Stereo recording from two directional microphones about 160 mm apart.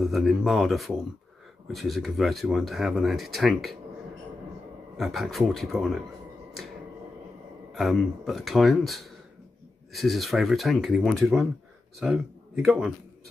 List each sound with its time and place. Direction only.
0.0 s speech: centre (ahead or behind)
4.9 s speech: centre (ahead or behind)
7.7 s speech: centre (ahead or behind)